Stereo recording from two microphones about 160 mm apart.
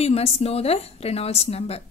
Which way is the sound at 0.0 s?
40° left (ahead or behind).